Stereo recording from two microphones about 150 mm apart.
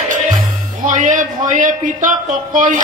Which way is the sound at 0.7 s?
60° right (ahead or behind).